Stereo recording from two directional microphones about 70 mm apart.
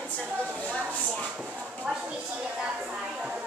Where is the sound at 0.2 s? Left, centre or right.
Right.